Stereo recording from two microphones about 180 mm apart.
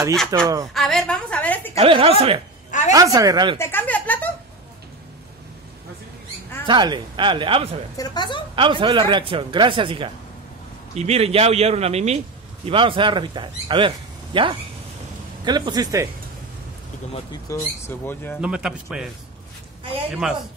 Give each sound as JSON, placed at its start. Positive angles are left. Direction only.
{"t": 0.3, "sound": "speech", "side_deg": -20}
{"t": 0.7, "sound": "a woman's voice", "side_deg": 0}
{"t": 1.8, "sound": "a man's voice", "side_deg": -30}
{"t": 2.9, "sound": "speech", "side_deg": -20}
{"t": 3.5, "sound": "a sound", "side_deg": 10}
{"t": 6.6, "sound": "speech", "side_deg": -25}
{"t": 8.0, "sound": "a woman's voice", "side_deg": 25}
{"t": 8.5, "sound": "a man's voice", "side_deg": -25}
{"t": 17.1, "sound": "speech", "side_deg": 20}
{"t": 18.4, "sound": "a man's voice", "side_deg": -5}
{"t": 20.2, "sound": "a man's voice", "side_deg": 0}